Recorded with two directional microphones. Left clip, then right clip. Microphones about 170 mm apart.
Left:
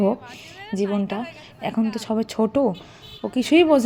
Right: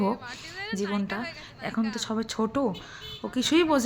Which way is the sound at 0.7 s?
25° left (ahead or behind).